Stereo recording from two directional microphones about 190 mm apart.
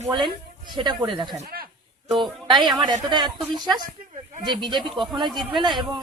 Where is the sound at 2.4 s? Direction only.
25° right (ahead or behind).